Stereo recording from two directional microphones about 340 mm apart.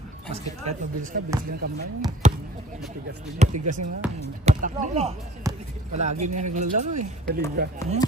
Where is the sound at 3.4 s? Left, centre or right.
Centre.